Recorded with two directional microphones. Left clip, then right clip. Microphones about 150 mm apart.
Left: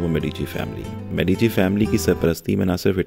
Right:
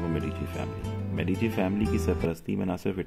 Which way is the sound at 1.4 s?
60° left (ahead or behind).